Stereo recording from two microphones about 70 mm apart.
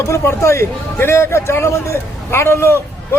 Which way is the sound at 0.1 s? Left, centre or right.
Left.